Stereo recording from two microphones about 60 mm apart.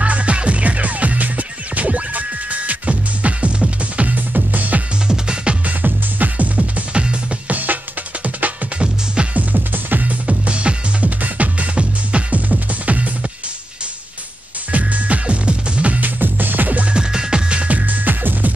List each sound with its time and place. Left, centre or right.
0.0 s music: right
5.0 s music: centre
5.8 s music: right
8.4 s music: centre
14.7 s music: right
16.9 s music: centre; by 18.5 s right